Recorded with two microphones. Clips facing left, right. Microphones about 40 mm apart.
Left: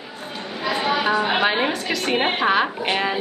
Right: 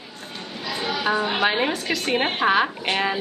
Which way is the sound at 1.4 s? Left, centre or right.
Centre.